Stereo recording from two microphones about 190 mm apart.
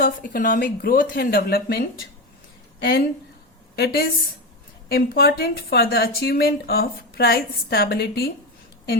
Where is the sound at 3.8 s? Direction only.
55° left (ahead or behind).